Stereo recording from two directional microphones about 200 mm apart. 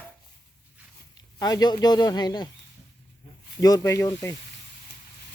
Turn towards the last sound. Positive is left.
turn(degrees=15)  # may be behind; listen again after turning